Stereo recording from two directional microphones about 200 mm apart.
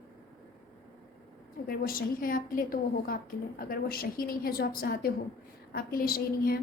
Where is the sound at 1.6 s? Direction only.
45° left (ahead or behind).